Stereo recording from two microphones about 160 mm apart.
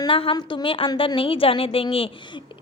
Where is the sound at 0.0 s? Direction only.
35° left (ahead or behind).